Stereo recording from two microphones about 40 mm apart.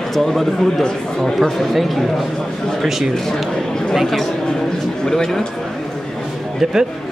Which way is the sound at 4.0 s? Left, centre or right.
Centre.